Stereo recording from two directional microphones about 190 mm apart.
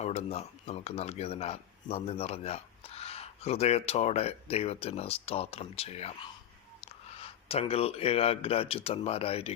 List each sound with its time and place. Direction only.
0.0 s speech: 35° left (ahead or behind)